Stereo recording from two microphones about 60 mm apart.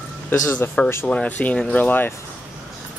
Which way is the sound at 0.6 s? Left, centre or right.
Left.